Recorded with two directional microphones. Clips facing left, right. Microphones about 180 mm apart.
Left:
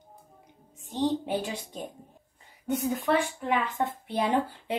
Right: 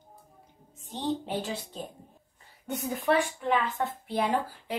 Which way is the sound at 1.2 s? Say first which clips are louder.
Left 2 dB; 15° left (ahead or behind).